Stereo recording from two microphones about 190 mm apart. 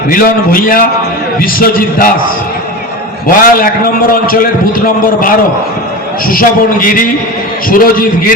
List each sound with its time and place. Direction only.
0.1 s a man's voice: 50° left (ahead or behind)
3.2 s a man's voice: 50° left (ahead or behind)